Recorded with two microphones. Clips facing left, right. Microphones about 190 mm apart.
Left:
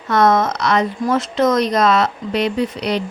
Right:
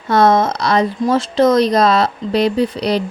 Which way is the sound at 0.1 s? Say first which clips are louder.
Right 2 dB; 30° right (ahead or behind).